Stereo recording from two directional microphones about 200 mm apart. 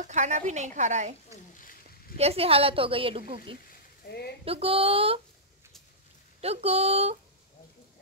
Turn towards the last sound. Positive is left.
turn(degrees=-30)  # may be behind; listen again after turning